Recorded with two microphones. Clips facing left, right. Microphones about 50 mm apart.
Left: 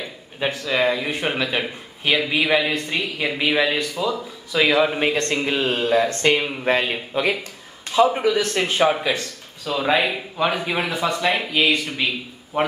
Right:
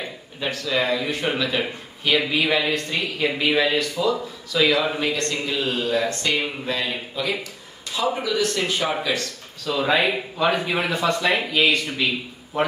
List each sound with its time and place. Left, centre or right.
0.4 s speech: left
2.3 s speech: centre
4.5 s a man's voice: left
9.7 s speech: centre